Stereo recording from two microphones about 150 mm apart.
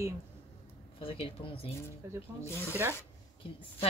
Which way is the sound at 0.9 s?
35° left (ahead or behind).